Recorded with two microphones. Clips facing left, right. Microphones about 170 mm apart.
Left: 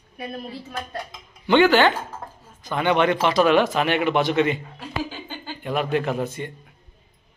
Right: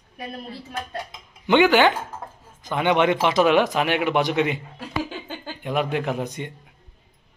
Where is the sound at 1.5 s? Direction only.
15° right (ahead or behind).